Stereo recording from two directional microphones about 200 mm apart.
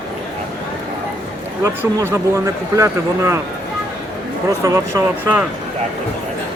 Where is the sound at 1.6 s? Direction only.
15° right (ahead or behind).